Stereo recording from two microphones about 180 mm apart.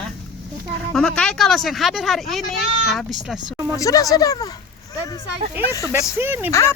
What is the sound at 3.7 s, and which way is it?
Speech, 20° left (ahead or behind).